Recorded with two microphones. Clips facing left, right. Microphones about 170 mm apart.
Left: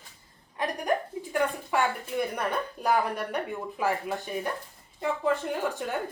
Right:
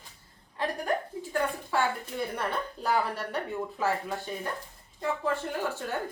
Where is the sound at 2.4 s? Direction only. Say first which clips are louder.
Left 2 dB; 15° left (ahead or behind).